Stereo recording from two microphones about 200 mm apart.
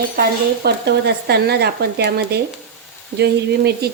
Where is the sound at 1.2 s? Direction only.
55° right (ahead or behind).